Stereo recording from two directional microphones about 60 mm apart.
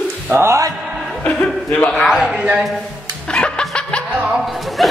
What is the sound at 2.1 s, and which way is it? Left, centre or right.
Speech, centre.